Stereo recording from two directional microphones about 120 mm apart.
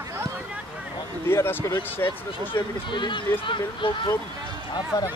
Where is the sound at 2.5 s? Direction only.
40° left (ahead or behind).